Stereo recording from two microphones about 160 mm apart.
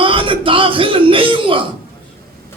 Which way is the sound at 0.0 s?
35° right (ahead or behind).